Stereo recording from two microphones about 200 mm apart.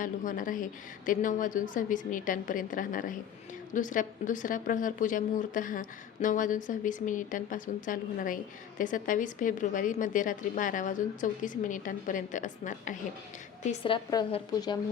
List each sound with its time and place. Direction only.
0.0 s a woman's voice: 40° left (ahead or behind)
13.7 s a woman's voice: 25° left (ahead or behind)